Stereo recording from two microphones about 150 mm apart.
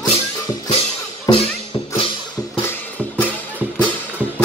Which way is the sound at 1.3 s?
25° left (ahead or behind).